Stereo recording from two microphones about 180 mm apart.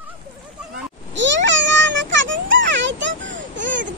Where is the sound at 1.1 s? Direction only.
85° right.